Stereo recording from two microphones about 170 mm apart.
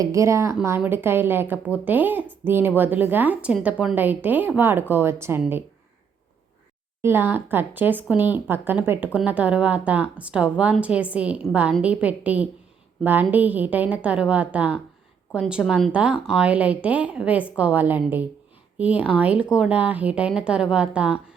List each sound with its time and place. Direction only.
0.0 s a woman's voice: 20° right (ahead or behind)
7.0 s a woman's voice: 15° right (ahead or behind)